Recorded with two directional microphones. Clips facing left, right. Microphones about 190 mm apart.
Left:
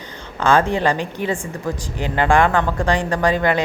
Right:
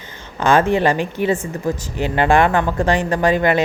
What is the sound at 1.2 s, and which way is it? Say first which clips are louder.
Speech: right 4 dB; 15° right (ahead or behind).